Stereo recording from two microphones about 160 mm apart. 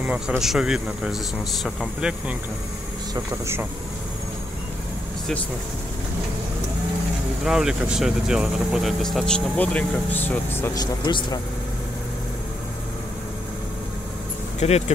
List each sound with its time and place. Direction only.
0.0 s speech: 10° right (ahead or behind)
7.4 s speech: 5° right (ahead or behind); by 11.4 s 30° left (ahead or behind)
14.6 s speech: 45° left (ahead or behind)